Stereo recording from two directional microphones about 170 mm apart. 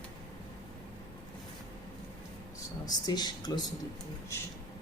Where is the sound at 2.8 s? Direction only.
25° left (ahead or behind).